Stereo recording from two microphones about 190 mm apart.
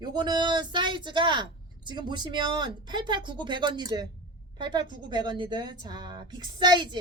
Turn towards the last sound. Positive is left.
turn(degrees=-25)  # may be behind; listen again after turning